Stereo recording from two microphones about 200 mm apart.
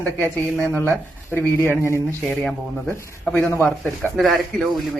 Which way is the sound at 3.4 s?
15° left (ahead or behind).